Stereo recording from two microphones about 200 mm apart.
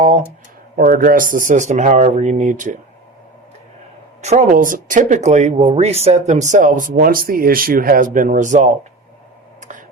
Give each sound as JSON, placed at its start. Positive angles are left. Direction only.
{"t": 0.8, "sound": "speech", "side_deg": -45}
{"t": 4.2, "sound": "speech", "side_deg": -35}
{"t": 9.6, "sound": "a sound", "side_deg": -40}